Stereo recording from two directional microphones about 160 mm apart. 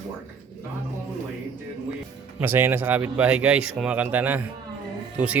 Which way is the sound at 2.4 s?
15° right (ahead or behind).